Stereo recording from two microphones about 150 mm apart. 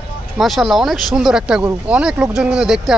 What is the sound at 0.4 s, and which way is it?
Speech, centre (ahead or behind).